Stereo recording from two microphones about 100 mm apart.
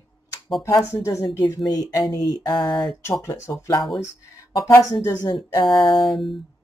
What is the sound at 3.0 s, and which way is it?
Speech, 30° left (ahead or behind).